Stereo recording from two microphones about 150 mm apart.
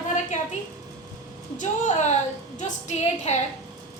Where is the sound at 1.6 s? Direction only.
55° left (ahead or behind).